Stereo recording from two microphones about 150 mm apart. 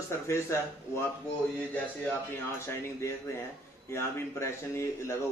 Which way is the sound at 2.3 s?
15° left (ahead or behind).